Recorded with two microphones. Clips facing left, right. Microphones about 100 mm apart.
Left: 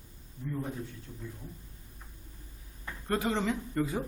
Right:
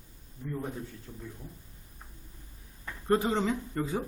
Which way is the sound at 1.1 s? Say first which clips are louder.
Right 1 dB; 20° right (ahead or behind).